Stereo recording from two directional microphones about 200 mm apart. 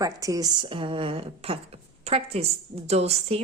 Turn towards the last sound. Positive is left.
turn(degrees=-30)  # may be behind; listen again after turning